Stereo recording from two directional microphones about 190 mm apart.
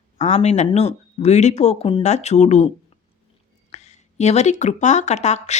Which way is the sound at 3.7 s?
35° left (ahead or behind).